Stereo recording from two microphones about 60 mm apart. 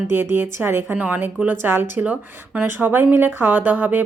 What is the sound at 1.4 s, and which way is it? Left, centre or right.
Speech, right.